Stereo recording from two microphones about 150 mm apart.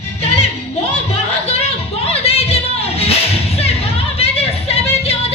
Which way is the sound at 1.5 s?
45° left (ahead or behind).